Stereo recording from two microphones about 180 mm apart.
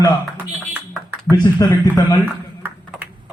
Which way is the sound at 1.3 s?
20° left (ahead or behind).